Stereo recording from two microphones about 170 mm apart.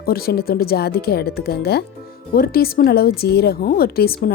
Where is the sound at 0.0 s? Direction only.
65° left (ahead or behind).